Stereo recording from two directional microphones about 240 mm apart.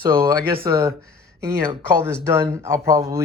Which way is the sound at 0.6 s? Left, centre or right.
Centre.